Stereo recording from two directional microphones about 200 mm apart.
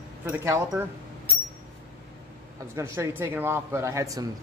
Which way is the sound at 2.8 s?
10° right (ahead or behind).